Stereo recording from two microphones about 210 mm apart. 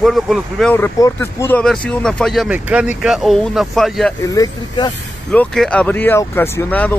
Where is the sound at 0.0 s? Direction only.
Centre (ahead or behind).